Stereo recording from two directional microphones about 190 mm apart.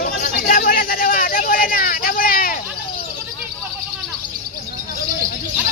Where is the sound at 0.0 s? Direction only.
45° left (ahead or behind).